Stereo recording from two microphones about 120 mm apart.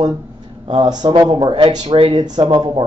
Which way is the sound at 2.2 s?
35° right (ahead or behind).